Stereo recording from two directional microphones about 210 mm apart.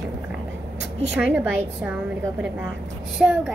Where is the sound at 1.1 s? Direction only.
10° right (ahead or behind).